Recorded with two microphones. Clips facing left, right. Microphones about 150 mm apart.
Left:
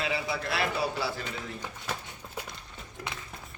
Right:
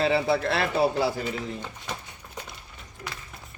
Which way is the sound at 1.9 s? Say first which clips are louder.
Even; 5° left (ahead or behind).